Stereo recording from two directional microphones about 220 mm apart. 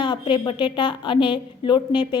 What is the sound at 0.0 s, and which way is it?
A woman's voice, 20° left (ahead or behind).